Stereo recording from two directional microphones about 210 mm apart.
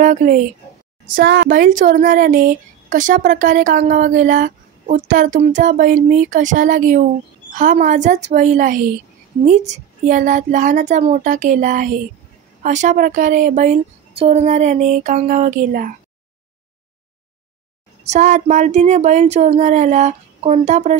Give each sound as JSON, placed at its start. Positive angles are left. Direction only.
{"t": 0.0, "sound": "speech", "side_deg": -40}
{"t": 18.0, "sound": "speech", "side_deg": -35}